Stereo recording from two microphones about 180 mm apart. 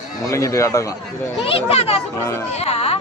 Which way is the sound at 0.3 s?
15° left (ahead or behind).